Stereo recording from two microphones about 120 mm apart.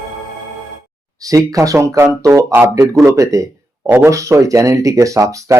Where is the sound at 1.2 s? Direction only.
30° right (ahead or behind).